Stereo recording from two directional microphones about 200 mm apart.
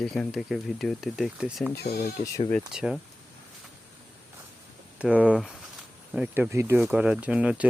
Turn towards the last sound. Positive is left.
turn(degrees=-5)  # may be behind; listen again after turning